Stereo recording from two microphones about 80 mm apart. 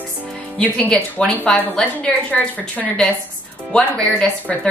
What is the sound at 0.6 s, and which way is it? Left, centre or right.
A woman's voice, centre.